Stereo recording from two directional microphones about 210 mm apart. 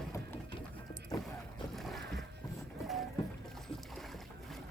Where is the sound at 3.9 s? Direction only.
Centre (ahead or behind).